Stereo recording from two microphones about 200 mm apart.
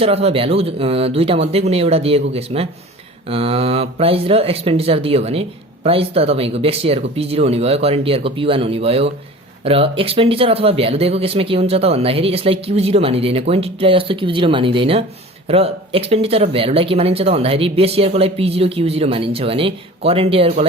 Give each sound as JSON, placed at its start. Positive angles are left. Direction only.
{"t": 0.0, "sound": "speech", "side_deg": -30}